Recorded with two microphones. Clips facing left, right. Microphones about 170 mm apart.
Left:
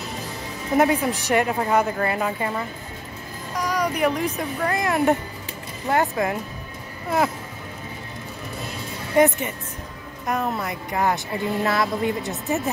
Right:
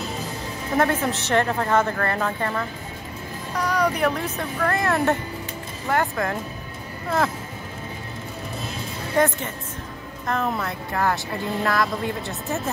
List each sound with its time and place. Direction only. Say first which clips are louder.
0.7 s a woman's voice: left 2 dB; 15° left (ahead or behind)
9.1 s a woman's voice: left 3 dB; 20° left (ahead or behind)